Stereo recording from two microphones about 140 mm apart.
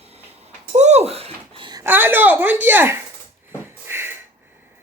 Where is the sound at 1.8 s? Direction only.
15° right (ahead or behind).